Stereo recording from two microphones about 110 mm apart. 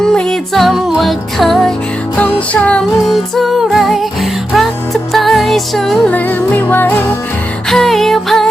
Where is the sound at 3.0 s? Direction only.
Centre (ahead or behind).